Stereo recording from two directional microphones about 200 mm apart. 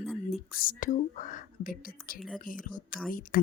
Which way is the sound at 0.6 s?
40° left (ahead or behind).